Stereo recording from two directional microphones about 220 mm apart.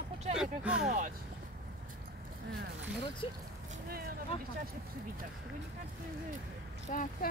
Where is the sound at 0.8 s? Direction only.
35° right (ahead or behind).